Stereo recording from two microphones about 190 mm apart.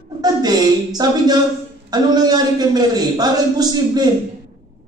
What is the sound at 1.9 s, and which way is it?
A man's voice, 20° right (ahead or behind).